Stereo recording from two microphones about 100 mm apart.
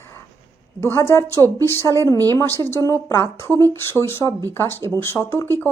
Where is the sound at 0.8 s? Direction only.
25° left (ahead or behind).